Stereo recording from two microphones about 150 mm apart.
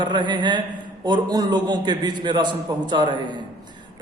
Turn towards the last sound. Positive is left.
turn(degrees=-30)  # may be behind; listen again after turning